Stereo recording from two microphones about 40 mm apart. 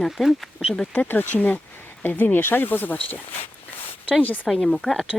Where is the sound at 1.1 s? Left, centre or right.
Left.